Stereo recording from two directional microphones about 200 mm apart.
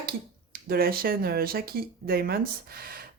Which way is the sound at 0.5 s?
50° right (ahead or behind).